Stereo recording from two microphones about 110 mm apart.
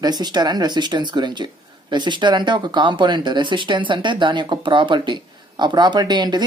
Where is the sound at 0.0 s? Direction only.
40° right (ahead or behind).